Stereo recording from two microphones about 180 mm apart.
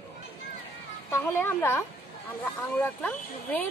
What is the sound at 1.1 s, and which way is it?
Speech, 10° left (ahead or behind).